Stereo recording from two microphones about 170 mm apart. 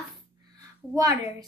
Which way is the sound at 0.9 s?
20° right (ahead or behind).